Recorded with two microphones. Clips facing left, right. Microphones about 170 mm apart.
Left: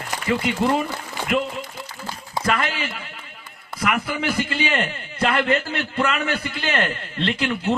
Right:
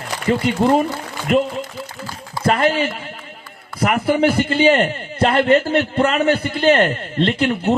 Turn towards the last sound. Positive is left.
turn(degrees=-45)  # may be behind; listen again after turning